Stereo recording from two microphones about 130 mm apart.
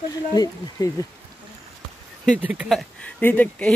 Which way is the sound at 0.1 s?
30° left (ahead or behind).